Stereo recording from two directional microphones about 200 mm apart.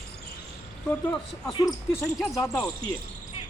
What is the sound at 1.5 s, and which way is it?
Speech, 20° left (ahead or behind).